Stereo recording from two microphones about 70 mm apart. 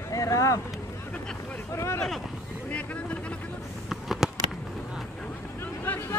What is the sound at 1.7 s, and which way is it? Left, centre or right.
Boat, left.